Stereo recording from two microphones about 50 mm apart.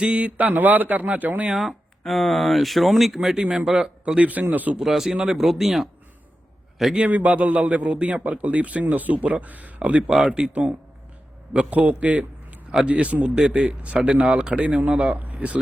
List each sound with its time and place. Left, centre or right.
0.0 s a man's voice: right
1.5 s speech: centre
3.4 s a man's voice: right
4.8 s speech: centre
7.1 s a man's voice: right
10.2 s speech: centre
10.5 s speech: right
13.3 s speech: centre
13.7 s a man's voice: right
14.8 s speech: right